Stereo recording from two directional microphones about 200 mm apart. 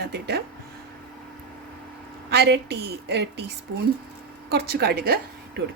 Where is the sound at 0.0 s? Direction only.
55° right (ahead or behind).